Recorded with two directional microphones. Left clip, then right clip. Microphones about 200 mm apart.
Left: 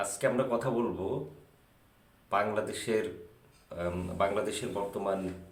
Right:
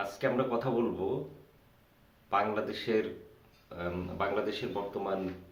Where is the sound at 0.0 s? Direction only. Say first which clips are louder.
Left 1 dB; 10° left (ahead or behind).